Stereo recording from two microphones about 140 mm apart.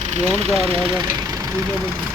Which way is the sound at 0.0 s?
55° right (ahead or behind).